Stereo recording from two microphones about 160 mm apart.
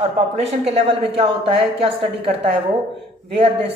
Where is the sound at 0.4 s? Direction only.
40° right (ahead or behind).